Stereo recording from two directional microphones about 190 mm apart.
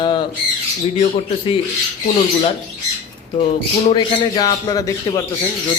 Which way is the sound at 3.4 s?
30° left (ahead or behind).